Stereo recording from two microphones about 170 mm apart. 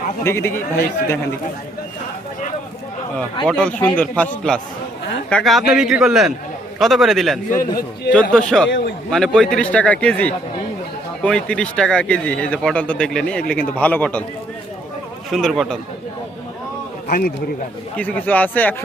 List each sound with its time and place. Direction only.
0.3 s speech: 15° left (ahead or behind)
3.4 s a man's voice: 5° left (ahead or behind)
7.5 s a man's voice: 60° left (ahead or behind)
8.1 s a man's voice: 5° left (ahead or behind)
15.3 s a man's voice: centre (ahead or behind)
17.1 s a man's voice: 60° left (ahead or behind)
17.9 s speech: 10° left (ahead or behind)